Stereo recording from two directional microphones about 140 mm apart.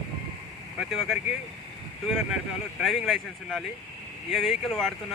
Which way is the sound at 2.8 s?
Centre (ahead or behind).